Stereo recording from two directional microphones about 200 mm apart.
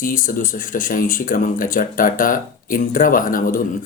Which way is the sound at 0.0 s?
45° left (ahead or behind).